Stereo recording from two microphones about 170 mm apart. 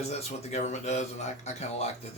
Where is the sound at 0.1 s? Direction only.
40° left (ahead or behind).